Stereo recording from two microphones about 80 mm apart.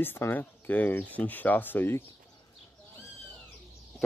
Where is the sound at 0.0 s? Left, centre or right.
Left.